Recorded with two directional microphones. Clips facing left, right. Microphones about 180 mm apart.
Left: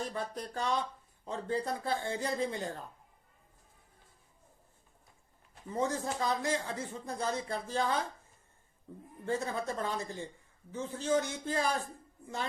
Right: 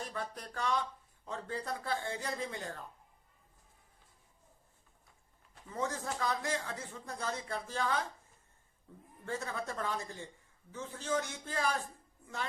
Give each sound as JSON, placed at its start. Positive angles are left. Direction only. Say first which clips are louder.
{"t": 0.1, "sound": "speech", "louder": "left 4 dB", "side_deg": 25}
{"t": 5.6, "sound": "speech", "louder": "left 4 dB", "side_deg": 25}
{"t": 9.2, "sound": "speech", "louder": "left 5 dB", "side_deg": 25}